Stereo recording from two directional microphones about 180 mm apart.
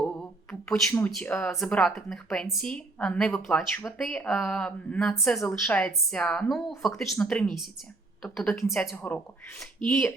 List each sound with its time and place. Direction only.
0.2 s speech: 5° left (ahead or behind)
5.3 s a woman's voice: 15° left (ahead or behind)
5.6 s speech: 5° left (ahead or behind)